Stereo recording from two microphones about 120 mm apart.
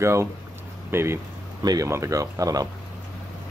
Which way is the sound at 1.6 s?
30° right (ahead or behind).